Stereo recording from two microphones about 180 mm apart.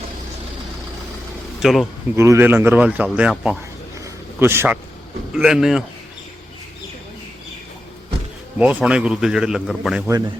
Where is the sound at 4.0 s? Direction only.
15° right (ahead or behind).